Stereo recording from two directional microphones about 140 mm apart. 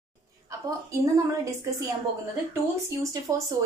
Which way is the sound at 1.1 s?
25° right (ahead or behind).